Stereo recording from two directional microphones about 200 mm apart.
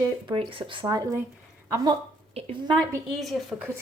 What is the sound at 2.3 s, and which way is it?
Speech, 30° right (ahead or behind).